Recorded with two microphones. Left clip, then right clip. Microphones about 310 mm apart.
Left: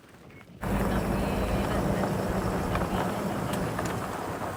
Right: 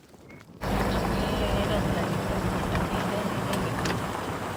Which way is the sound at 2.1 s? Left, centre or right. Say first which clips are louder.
Even; centre.